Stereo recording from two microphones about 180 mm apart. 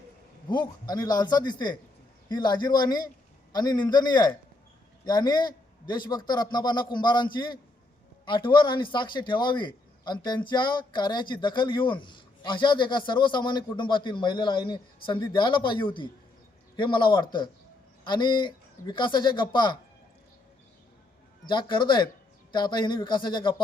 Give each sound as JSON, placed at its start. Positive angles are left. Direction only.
{"t": 0.4, "sound": "a man's voice", "side_deg": 25}
{"t": 21.4, "sound": "a man's voice", "side_deg": 25}